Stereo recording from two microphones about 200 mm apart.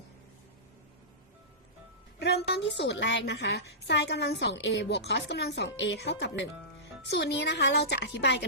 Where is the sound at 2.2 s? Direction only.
55° left (ahead or behind).